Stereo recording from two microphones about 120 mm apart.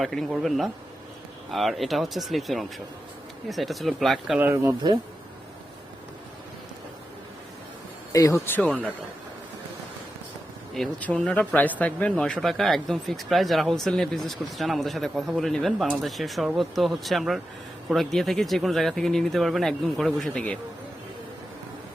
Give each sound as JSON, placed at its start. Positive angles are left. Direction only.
{"t": 0.0, "sound": "speech", "side_deg": 5}
{"t": 4.4, "sound": "speech", "side_deg": -15}
{"t": 8.1, "sound": "speech", "side_deg": 25}
{"t": 11.0, "sound": "speech", "side_deg": 10}